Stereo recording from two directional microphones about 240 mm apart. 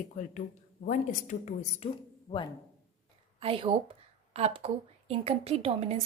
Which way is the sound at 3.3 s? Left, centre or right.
Right.